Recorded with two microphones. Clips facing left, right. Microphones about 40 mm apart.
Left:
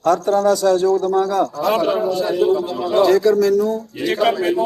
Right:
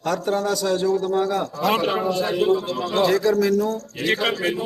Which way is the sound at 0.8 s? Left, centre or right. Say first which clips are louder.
Left 5 dB; right.